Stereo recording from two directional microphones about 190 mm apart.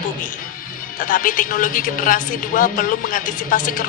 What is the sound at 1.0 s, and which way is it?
A woman's voice, 45° left (ahead or behind).